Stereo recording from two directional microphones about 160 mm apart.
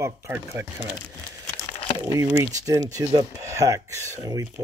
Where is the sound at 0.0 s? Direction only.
15° right (ahead or behind).